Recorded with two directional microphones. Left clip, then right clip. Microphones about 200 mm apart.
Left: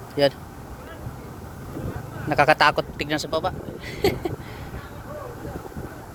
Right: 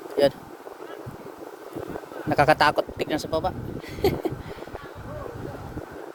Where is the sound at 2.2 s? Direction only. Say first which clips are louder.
Left 2 dB; 15° right (ahead or behind).